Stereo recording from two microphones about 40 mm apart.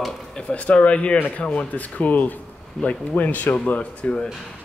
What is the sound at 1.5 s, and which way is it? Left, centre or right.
Speech, left.